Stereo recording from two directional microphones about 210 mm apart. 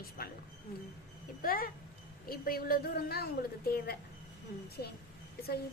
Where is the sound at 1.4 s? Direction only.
45° left (ahead or behind).